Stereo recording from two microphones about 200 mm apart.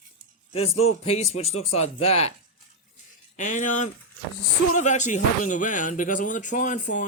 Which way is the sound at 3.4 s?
40° left (ahead or behind).